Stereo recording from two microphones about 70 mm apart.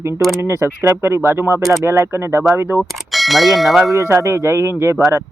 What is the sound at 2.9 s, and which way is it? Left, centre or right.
Speech, centre.